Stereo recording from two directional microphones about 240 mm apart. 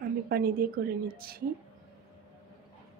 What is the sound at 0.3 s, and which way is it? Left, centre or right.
Speech, right.